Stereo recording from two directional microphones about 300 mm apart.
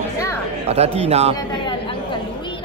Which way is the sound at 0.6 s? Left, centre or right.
Right.